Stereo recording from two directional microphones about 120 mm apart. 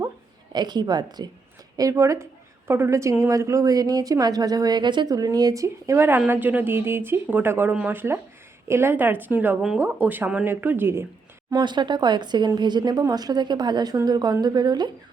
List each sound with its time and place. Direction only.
0.5 s a woman's voice: 35° right (ahead or behind); by 11.0 s 20° right (ahead or behind)
11.5 s a woman's voice: 40° right (ahead or behind)